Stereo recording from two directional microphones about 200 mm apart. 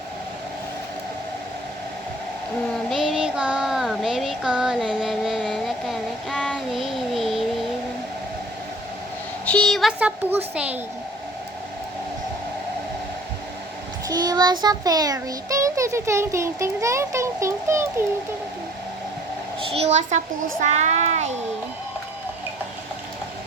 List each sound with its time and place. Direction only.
2.9 s child singing: centre (ahead or behind)
9.5 s a child's voice: 5° left (ahead or behind)
14.1 s child singing: 20° right (ahead or behind)
19.7 s a child's voice: 35° right (ahead or behind)